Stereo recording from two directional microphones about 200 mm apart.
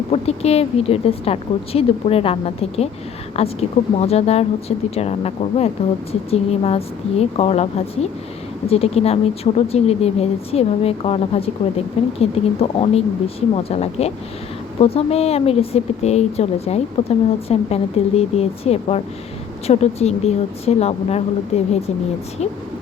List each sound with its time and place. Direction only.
0.1 s a woman's voice: 30° left (ahead or behind)